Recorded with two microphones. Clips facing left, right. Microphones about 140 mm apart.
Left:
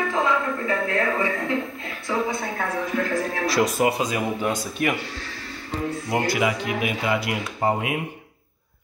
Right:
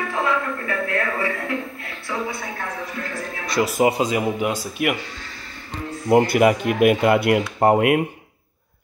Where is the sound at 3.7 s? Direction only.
25° right (ahead or behind).